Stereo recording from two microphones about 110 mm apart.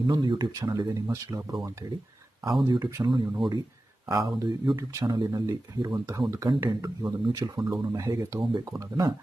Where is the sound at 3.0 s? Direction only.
45° right (ahead or behind).